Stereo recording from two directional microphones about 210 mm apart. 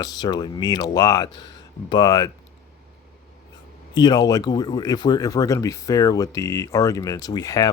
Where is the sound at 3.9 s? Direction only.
20° left (ahead or behind).